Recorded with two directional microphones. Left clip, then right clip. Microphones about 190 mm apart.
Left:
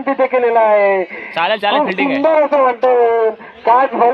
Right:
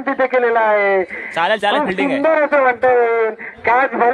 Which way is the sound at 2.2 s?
40° left (ahead or behind).